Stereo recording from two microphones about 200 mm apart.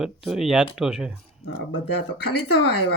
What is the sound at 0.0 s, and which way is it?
A man's voice, centre (ahead or behind).